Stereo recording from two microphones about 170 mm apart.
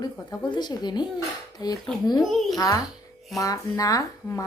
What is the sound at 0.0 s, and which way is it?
Speech, 25° left (ahead or behind).